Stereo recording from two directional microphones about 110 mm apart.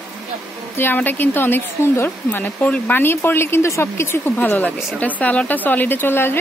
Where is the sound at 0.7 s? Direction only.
20° left (ahead or behind).